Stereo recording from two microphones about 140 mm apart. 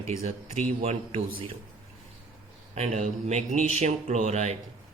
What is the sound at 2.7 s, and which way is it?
Speech, 50° right (ahead or behind).